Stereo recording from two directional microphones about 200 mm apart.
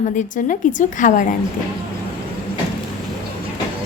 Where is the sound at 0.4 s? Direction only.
40° left (ahead or behind).